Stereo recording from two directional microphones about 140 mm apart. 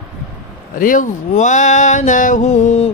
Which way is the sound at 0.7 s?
75° left (ahead or behind).